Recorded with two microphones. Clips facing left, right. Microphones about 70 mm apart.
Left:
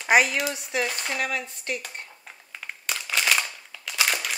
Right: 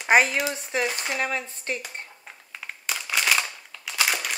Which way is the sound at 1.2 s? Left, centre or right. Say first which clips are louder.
Right 1 dB; right.